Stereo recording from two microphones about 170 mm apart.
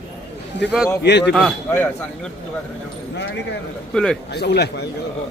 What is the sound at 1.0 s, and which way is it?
Speech, 90° left.